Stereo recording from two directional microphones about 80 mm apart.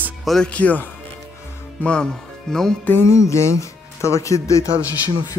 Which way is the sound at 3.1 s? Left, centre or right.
Left.